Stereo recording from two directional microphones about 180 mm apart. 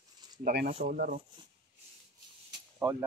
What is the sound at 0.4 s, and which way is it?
Speech, 60° right (ahead or behind).